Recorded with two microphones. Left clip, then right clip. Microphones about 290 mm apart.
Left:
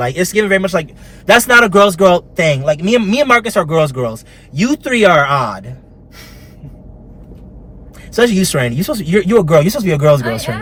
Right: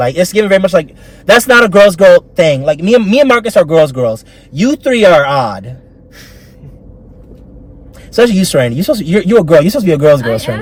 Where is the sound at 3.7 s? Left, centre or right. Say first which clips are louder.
Right 6 dB; centre.